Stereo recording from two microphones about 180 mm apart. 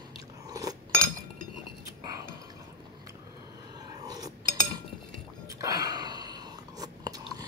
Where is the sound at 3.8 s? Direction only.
20° right (ahead or behind).